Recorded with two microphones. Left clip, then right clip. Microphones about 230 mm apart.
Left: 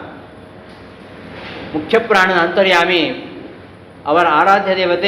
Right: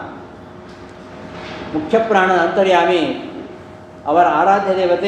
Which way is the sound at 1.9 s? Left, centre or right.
Centre.